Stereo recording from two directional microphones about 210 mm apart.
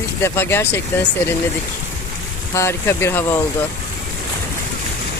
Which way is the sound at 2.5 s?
10° left (ahead or behind).